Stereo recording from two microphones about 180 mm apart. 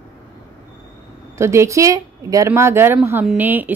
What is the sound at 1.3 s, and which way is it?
A woman's voice, 15° right (ahead or behind).